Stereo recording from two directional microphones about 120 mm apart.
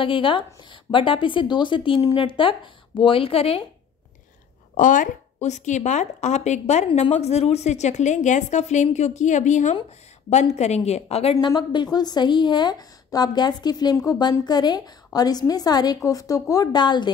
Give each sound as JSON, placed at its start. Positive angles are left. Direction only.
{"t": 0.0, "sound": "a woman's voice", "side_deg": 45}
{"t": 4.7, "sound": "a woman's voice", "side_deg": 90}
{"t": 10.3, "sound": "a woman's voice", "side_deg": 65}
{"t": 11.4, "sound": "a woman's voice", "side_deg": 40}